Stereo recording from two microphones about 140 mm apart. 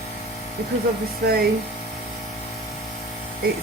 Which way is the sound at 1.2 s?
90° right.